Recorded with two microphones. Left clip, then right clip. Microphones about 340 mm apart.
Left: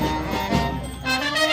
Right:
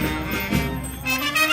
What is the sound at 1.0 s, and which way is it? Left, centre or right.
Music, left.